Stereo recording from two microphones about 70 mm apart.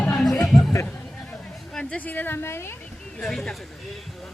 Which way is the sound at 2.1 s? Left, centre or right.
Left.